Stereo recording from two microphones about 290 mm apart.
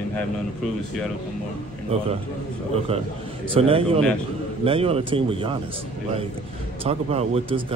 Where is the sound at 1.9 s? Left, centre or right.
Centre.